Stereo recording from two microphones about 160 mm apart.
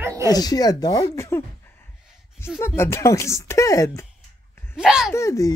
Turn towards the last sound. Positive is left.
turn(degrees=20)  # may be behind; listen again after turning